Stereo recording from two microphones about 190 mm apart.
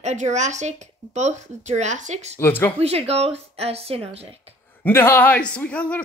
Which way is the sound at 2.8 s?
35° right (ahead or behind).